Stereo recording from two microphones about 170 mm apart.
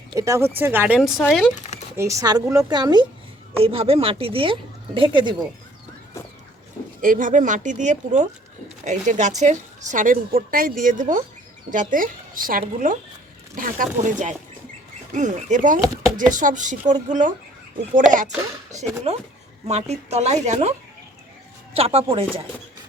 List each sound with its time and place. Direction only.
0.1 s speech: 20° right (ahead or behind); by 1.5 s centre (ahead or behind)
2.0 s a woman's voice: 20° right (ahead or behind)
3.6 s a woman's voice: 35° right (ahead or behind)
7.0 s a woman's voice: 50° right (ahead or behind)
18.7 s a woman's voice: 40° right (ahead or behind)
21.8 s a woman's voice: 35° right (ahead or behind)